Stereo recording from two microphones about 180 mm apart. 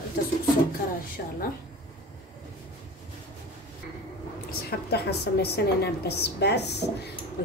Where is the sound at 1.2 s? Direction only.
60° left (ahead or behind).